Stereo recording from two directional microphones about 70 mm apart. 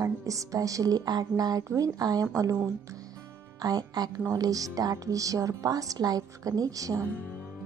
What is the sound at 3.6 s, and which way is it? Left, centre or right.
Speech, right.